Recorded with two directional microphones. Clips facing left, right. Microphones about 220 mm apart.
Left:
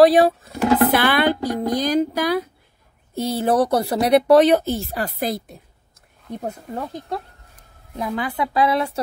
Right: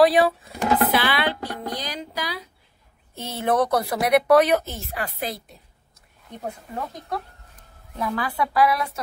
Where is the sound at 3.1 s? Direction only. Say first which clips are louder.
Left 4 dB; 35° left (ahead or behind).